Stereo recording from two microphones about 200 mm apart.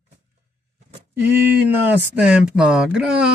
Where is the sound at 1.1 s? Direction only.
10° right (ahead or behind).